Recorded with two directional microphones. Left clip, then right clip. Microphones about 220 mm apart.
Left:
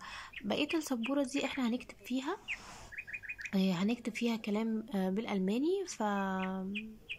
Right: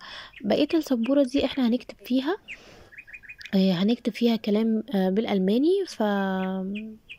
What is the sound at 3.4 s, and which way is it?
Speech, 20° right (ahead or behind).